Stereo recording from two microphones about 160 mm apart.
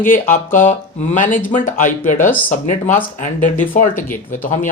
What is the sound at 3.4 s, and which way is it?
Speech, 55° left (ahead or behind).